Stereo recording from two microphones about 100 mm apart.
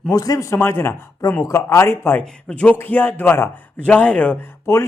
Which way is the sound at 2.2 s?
10° left (ahead or behind).